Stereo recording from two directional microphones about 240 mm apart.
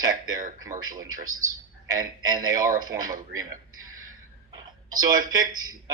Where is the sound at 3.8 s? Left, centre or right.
Right.